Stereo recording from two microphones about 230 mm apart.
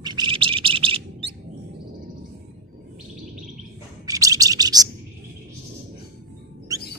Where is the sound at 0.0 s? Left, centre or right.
Centre.